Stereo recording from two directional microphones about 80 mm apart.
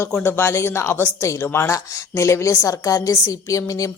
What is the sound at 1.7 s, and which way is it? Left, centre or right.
A woman's voice, left.